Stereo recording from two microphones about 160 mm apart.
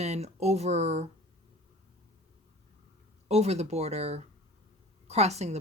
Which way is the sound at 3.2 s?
40° right (ahead or behind).